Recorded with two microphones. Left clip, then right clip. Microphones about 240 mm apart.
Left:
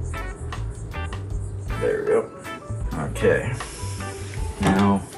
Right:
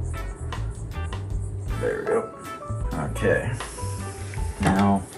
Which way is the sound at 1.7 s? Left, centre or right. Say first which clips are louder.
Left 3 dB; centre.